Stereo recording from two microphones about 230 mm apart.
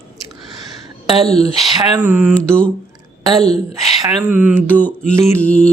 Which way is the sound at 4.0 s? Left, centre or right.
Centre.